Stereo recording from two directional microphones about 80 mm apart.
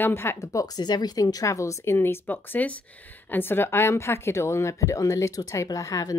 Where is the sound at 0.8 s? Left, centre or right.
Left.